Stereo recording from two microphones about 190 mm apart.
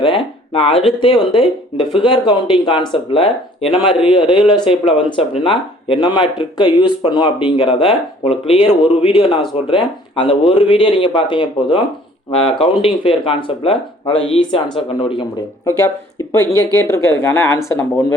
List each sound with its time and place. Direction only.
0.0 s speech: 30° left (ahead or behind)
14.2 s speech: 90° left
14.8 s speech: 25° left (ahead or behind)
16.7 s speech: 15° left (ahead or behind)